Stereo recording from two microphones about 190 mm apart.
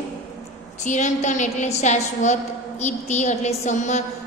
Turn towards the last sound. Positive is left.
turn(degrees=40)  # may be behind; listen again after turning